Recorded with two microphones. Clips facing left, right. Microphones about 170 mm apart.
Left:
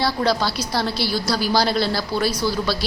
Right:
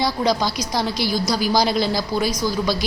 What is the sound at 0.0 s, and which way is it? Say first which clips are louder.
Speech: even; 15° right (ahead or behind).